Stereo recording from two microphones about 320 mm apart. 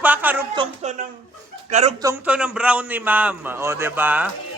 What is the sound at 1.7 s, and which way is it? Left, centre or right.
Speech, right.